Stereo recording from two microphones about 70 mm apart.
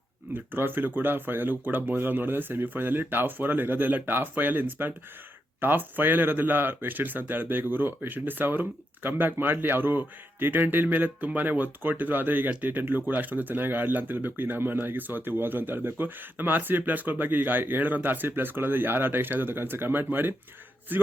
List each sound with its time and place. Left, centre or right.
0.3 s speech: right